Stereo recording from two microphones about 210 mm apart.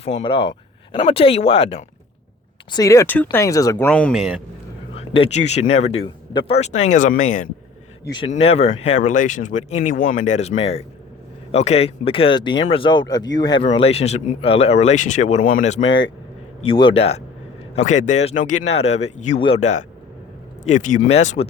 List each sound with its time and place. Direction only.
0.0 s speech: 30° left (ahead or behind)
2.7 s speech: 15° left (ahead or behind); by 4.4 s 5° right (ahead or behind)
4.9 s speech: 25° left (ahead or behind)
16.6 s speech: 25° left (ahead or behind)